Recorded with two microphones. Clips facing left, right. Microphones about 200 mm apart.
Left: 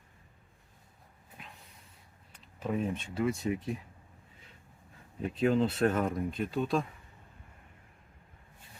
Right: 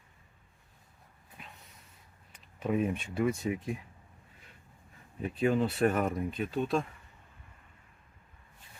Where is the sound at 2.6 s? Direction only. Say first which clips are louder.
Right 3 dB; 5° right (ahead or behind).